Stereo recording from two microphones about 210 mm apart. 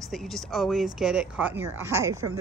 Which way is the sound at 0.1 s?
Centre (ahead or behind).